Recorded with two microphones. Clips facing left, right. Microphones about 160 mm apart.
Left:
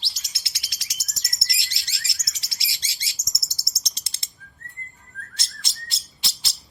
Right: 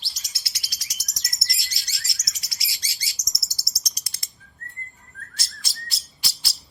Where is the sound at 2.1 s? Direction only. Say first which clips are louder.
Even; 25° left (ahead or behind).